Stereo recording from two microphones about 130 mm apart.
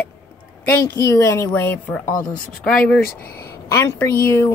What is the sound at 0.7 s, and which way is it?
A woman's voice, 20° left (ahead or behind).